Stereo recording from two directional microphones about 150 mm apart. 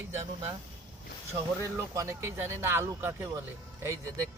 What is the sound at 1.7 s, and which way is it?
Speech, 20° right (ahead or behind).